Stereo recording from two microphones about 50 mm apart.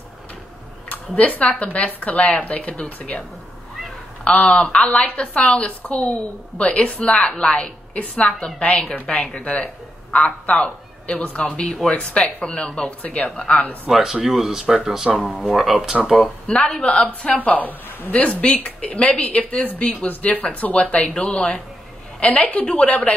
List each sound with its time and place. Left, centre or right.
0.8 s speech: left
4.2 s speech: left
7.9 s a man's voice: left
14.2 s speech: centre
16.7 s speech: left
17.4 s speech: left